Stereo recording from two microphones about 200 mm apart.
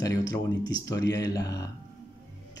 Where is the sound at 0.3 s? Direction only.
20° left (ahead or behind).